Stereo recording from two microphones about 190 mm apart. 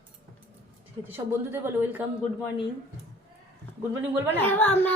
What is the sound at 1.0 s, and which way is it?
Speech, 10° right (ahead or behind).